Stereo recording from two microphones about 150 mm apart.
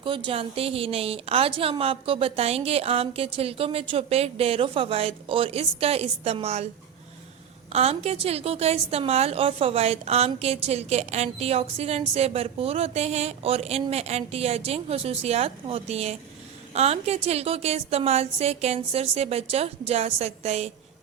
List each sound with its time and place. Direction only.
0.0 s speech: 35° right (ahead or behind)
7.7 s a woman's voice: 40° right (ahead or behind)